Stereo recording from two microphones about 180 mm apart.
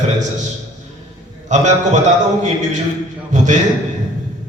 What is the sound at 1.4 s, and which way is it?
Speech, 40° right (ahead or behind).